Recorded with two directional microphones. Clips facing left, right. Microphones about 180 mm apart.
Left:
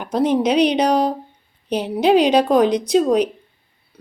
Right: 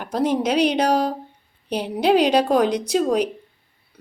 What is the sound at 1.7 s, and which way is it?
A woman's voice, 10° right (ahead or behind).